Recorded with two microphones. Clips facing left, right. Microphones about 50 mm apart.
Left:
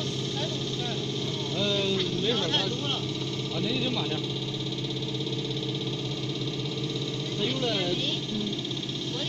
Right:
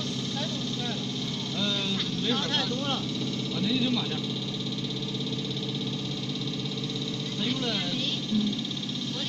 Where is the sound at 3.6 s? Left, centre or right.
Left.